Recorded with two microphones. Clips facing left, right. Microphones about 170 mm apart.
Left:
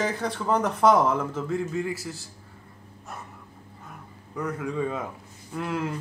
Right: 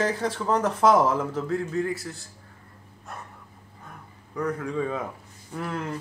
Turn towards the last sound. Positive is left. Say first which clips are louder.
# left 2 dB
turn(degrees=5)  # may be behind; listen again after turning